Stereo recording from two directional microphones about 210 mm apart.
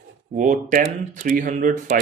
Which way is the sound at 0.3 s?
35° right (ahead or behind).